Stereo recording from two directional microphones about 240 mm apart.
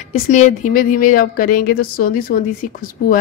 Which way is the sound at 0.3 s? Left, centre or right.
Left.